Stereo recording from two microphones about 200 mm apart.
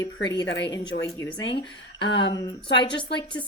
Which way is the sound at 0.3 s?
60° left (ahead or behind).